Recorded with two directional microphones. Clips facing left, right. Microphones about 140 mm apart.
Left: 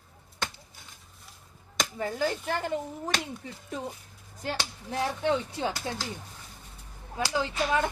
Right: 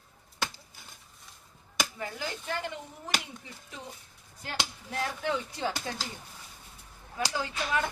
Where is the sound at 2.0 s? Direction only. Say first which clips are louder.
Left 8 dB; 40° left (ahead or behind).